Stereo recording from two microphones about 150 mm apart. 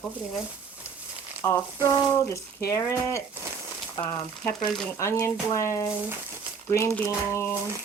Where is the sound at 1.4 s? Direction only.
20° left (ahead or behind).